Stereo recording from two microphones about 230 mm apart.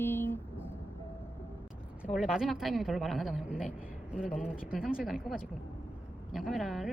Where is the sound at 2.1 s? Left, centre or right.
Centre.